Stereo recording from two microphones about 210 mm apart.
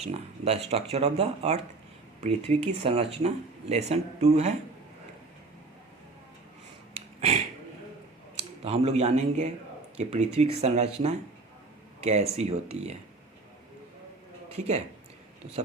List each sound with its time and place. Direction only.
0.0 s speech: 30° right (ahead or behind)
7.2 s a sound: 30° right (ahead or behind)
8.4 s speech: 30° right (ahead or behind)
12.4 s speech: 30° right (ahead or behind)
14.5 s speech: 30° right (ahead or behind)